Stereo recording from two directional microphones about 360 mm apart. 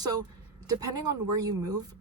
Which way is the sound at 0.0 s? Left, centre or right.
Centre.